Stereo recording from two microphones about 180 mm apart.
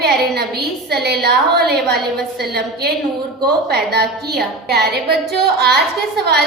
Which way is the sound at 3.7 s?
65° right (ahead or behind).